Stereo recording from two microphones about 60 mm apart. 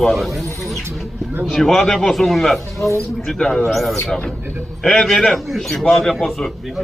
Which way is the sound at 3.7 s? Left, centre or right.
Centre.